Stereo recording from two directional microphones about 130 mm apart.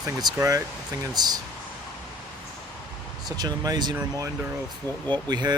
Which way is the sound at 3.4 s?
30° right (ahead or behind).